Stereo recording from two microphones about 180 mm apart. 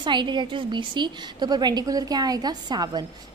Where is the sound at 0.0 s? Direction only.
25° right (ahead or behind).